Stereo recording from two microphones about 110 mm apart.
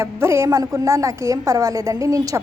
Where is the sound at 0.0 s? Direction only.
25° right (ahead or behind).